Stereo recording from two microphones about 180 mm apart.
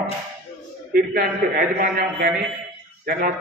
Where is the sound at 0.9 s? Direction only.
55° right (ahead or behind).